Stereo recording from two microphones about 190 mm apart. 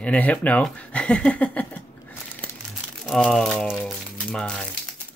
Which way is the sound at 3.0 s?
5° left (ahead or behind).